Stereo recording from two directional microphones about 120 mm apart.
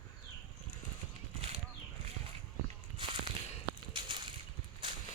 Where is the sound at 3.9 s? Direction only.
40° right (ahead or behind).